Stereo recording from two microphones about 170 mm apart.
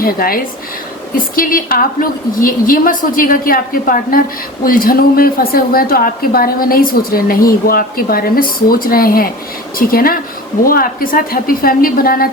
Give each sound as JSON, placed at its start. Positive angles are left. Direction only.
{"t": 0.0, "sound": "a woman's voice", "side_deg": 60}